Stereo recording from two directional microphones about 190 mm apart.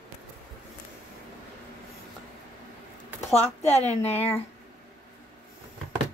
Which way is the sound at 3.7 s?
35° left (ahead or behind).